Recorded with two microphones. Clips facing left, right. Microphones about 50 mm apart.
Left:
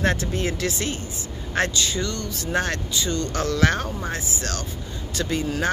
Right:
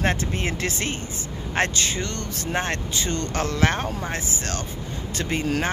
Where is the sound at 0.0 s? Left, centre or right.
Right.